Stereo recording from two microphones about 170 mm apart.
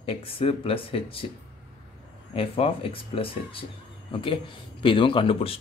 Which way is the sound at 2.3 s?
35° left (ahead or behind).